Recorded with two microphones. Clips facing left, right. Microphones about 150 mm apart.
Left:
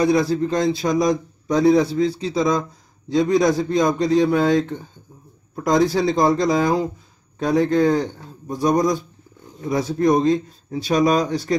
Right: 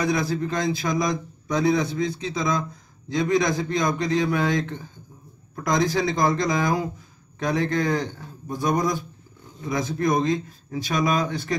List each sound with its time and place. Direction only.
0.0 s a man's voice: 35° left (ahead or behind)